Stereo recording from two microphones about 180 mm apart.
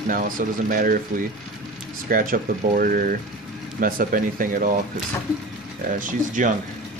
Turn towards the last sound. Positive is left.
turn(degrees=-45)  # may be behind; listen again after turning